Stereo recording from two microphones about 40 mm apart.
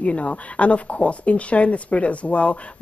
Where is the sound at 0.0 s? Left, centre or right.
Left.